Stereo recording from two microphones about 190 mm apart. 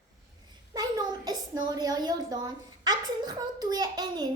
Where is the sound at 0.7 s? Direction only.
20° right (ahead or behind).